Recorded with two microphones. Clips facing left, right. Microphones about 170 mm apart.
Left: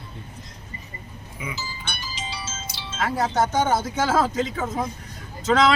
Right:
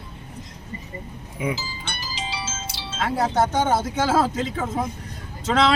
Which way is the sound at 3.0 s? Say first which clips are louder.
Right 1 dB; 30° right (ahead or behind).